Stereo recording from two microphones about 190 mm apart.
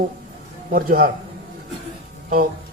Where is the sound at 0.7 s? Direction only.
50° right (ahead or behind).